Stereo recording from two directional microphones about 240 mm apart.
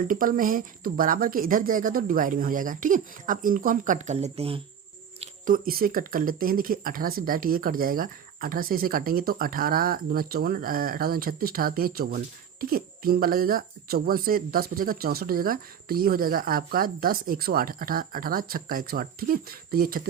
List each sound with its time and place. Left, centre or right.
0.1 s speech: right
5.2 s speech: right